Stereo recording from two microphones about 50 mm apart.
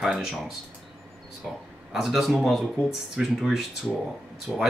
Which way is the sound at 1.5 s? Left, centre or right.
Centre.